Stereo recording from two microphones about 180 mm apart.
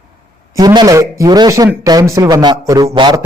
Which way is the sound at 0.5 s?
25° right (ahead or behind).